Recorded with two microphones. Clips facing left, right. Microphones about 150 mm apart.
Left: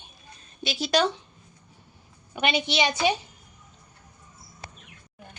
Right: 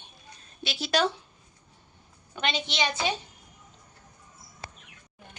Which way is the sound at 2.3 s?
10° left (ahead or behind).